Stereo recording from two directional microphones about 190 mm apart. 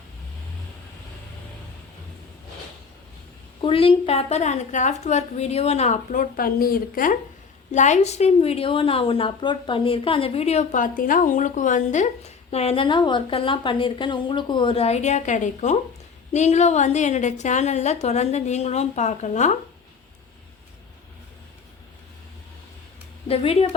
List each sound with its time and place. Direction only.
3.6 s a woman's voice: 30° left (ahead or behind)
23.3 s a woman's voice: 30° left (ahead or behind)